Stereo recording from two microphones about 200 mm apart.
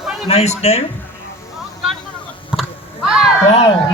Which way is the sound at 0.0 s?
Centre (ahead or behind).